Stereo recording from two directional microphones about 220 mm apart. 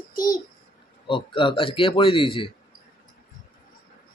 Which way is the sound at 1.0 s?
25° left (ahead or behind).